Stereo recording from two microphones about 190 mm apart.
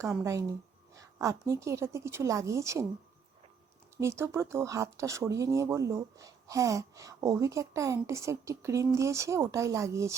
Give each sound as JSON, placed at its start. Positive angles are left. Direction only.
{"t": 0.2, "sound": "speech", "side_deg": -15}
{"t": 4.0, "sound": "speech", "side_deg": -15}